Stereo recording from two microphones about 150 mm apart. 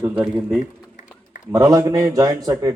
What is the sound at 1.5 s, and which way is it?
A man's voice, 25° right (ahead or behind).